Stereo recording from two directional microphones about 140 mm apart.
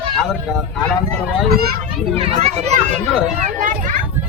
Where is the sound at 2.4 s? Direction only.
50° right (ahead or behind).